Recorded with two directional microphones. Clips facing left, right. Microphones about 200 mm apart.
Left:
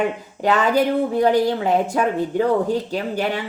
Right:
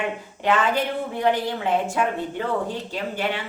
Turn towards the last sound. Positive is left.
turn(degrees=40)  # may be behind; listen again after turning